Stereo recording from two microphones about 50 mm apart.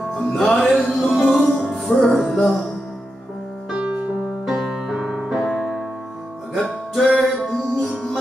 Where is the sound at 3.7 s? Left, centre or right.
Right.